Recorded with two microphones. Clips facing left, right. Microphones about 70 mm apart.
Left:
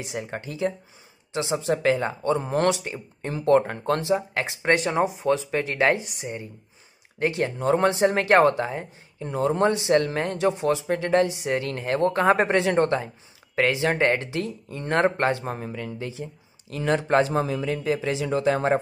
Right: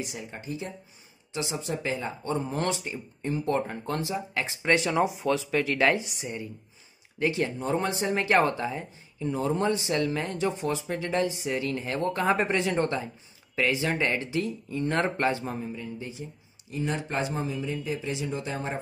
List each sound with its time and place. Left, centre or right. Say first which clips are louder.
0.2 s speech: left 8 dB; left
1.3 s speech: left 7 dB; left
4.6 s speech: left 2 dB; left
7.2 s speech: left 2 dB; left
7.6 s speech: left 11 dB; left
13.6 s speech: left 4 dB; left
13.8 s speech: left 5 dB; left
15.4 s speech: left 2 dB; left
15.7 s a man's voice: left 4 dB; left